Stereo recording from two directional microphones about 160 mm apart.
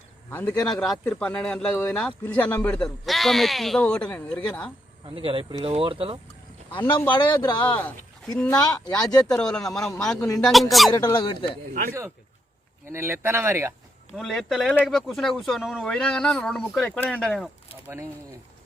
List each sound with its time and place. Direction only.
0.3 s a man's voice: 10° left (ahead or behind)
5.0 s speech: 35° right (ahead or behind)
7.1 s a man's voice: 30° left (ahead or behind)
7.6 s a man's voice: 10° left (ahead or behind)
8.4 s speech: 20° left (ahead or behind)
9.2 s speech: 5° left (ahead or behind)
10.9 s speech: 25° left (ahead or behind)
11.7 s speech: 60° right (ahead or behind)
12.9 s speech: 15° right (ahead or behind)
14.2 s speech: centre (ahead or behind)